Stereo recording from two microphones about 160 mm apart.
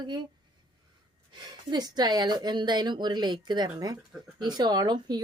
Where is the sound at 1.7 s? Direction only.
25° right (ahead or behind).